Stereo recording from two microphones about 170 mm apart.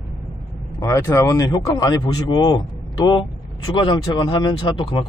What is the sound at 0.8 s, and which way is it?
Speech, 15° left (ahead or behind).